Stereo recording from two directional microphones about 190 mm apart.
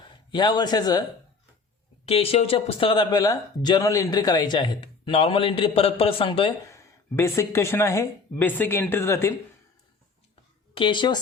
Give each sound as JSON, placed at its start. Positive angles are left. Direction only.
{"t": 0.3, "sound": "speech", "side_deg": 25}
{"t": 2.0, "sound": "speech", "side_deg": 30}
{"t": 6.7, "sound": "speech", "side_deg": 15}
{"t": 10.8, "sound": "speech", "side_deg": 25}